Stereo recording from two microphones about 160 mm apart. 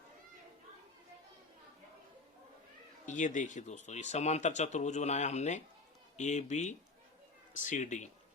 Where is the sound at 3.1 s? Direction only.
50° left (ahead or behind).